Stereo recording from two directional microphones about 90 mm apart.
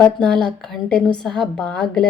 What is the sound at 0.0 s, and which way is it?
Speech, 10° left (ahead or behind).